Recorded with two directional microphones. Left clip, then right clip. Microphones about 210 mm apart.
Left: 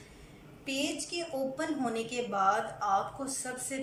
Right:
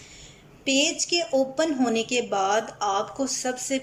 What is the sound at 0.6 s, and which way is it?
A woman's voice, 50° right (ahead or behind).